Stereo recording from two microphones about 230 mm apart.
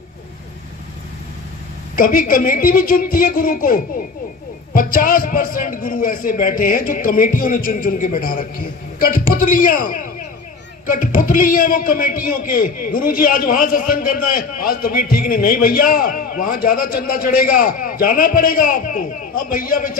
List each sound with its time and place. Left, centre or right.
2.0 s a man's voice: left